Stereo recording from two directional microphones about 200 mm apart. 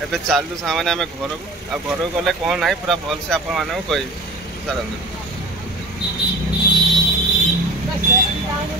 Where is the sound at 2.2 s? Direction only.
Centre (ahead or behind).